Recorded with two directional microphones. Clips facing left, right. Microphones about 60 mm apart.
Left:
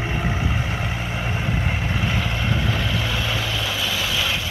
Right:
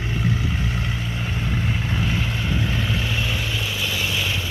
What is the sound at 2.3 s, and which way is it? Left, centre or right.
Vehicle, left.